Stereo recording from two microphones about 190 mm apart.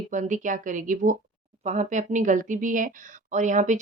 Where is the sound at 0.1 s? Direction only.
40° right (ahead or behind).